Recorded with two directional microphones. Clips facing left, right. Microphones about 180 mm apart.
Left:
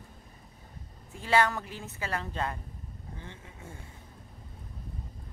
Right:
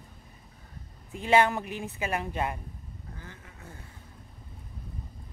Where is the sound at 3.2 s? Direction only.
25° left (ahead or behind).